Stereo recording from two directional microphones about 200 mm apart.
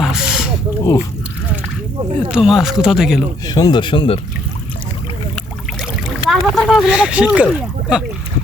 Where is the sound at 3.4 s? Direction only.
20° left (ahead or behind).